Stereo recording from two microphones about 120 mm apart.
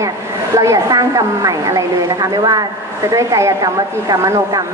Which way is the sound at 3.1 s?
25° right (ahead or behind).